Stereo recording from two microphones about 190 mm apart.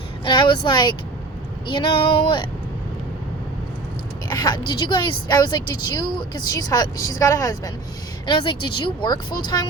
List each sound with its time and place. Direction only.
0.3 s a woman's voice: 25° left (ahead or behind)
4.3 s a woman's voice: 20° left (ahead or behind)